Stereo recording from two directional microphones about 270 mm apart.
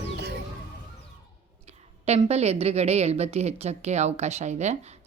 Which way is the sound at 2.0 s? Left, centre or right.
Right.